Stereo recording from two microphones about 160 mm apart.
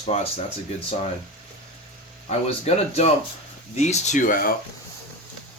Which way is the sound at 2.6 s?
40° left (ahead or behind).